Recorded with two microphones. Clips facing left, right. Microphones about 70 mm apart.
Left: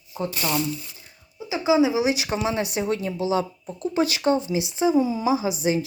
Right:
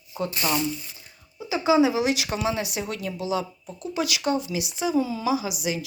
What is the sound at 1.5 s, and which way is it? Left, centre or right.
Speech, centre.